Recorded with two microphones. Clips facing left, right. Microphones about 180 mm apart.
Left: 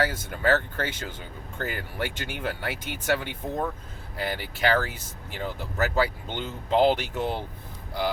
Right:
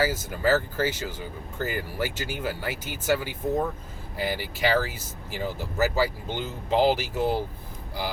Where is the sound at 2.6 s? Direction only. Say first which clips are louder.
Right 1 dB; 65° left (ahead or behind).